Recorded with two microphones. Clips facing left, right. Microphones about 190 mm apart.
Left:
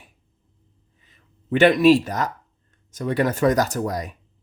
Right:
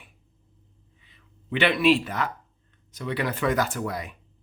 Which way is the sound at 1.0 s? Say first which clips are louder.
Left 8 dB; 45° left (ahead or behind).